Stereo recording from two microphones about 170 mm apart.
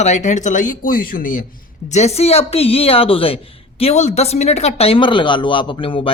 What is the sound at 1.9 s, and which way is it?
Speech, 40° left (ahead or behind).